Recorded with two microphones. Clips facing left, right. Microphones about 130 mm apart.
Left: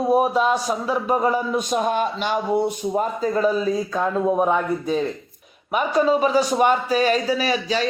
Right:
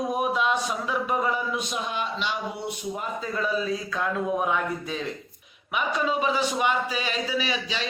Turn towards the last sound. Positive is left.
turn(degrees=40)  # may be behind; listen again after turning